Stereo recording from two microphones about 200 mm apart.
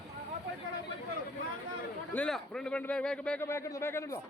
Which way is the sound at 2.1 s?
5° left (ahead or behind).